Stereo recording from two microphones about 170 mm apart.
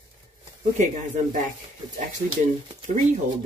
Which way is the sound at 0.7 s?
45° right (ahead or behind).